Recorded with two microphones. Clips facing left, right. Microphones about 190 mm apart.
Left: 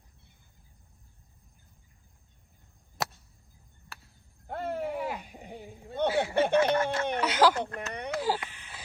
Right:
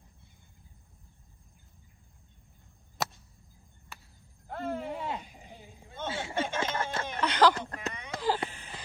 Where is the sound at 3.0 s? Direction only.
Centre (ahead or behind).